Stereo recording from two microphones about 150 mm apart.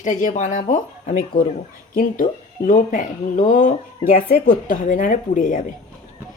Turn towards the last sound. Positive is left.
turn(degrees=60)  # may be behind; listen again after turning